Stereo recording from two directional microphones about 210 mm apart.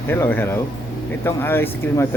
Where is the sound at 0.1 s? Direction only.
10° left (ahead or behind).